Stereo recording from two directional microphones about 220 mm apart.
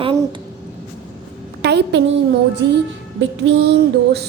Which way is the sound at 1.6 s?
50° right (ahead or behind).